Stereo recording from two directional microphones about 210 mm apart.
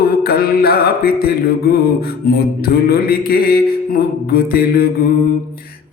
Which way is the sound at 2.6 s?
45° left (ahead or behind).